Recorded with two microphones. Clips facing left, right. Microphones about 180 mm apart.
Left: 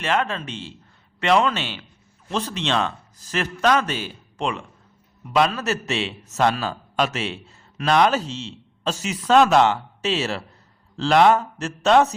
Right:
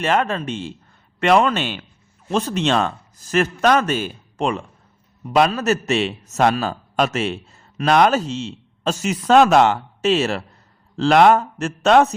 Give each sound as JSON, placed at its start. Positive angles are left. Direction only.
{"t": 0.0, "sound": "speech", "side_deg": -45}